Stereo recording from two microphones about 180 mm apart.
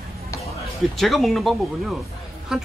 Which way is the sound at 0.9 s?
Centre (ahead or behind).